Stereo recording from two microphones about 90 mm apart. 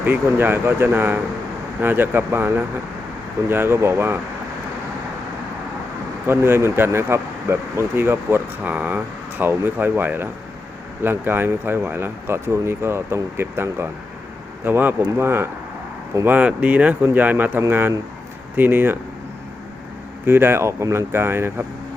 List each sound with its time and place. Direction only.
0.0 s speech: 25° right (ahead or behind)
6.2 s speech: 25° right (ahead or behind)
20.2 s speech: 25° right (ahead or behind)